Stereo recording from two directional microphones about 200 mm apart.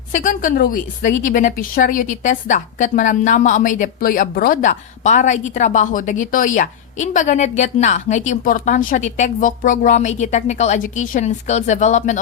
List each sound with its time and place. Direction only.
0.1 s a woman's voice: 40° left (ahead or behind)